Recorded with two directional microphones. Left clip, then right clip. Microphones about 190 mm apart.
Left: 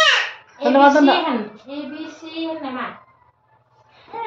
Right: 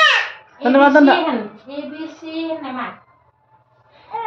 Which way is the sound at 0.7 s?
30° right (ahead or behind).